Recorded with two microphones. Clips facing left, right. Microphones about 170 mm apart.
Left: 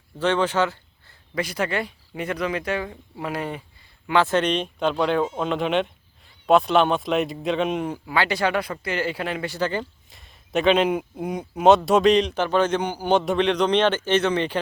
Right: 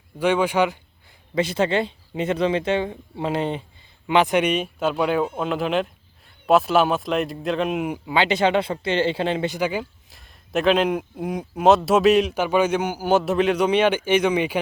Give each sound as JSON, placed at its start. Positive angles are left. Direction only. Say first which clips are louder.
{"t": 0.2, "sound": "speech", "louder": "right 2 dB", "side_deg": -10}
{"t": 1.4, "sound": "speech", "louder": "right 5 dB", "side_deg": -25}
{"t": 8.0, "sound": "speech", "louder": "right 4 dB", "side_deg": -20}
{"t": 9.6, "sound": "speech", "louder": "right 1 dB", "side_deg": -10}
{"t": 10.1, "sound": "speech", "louder": "even", "side_deg": 0}